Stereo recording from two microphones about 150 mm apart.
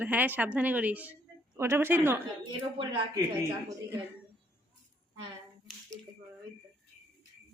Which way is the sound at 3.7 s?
20° right (ahead or behind).